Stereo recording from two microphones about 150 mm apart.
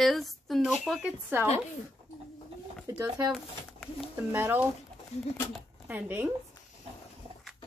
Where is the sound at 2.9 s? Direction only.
25° right (ahead or behind).